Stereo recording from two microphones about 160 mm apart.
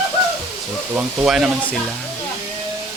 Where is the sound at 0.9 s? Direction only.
5° right (ahead or behind).